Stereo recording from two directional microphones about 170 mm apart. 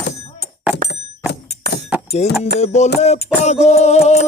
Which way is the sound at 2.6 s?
40° left (ahead or behind).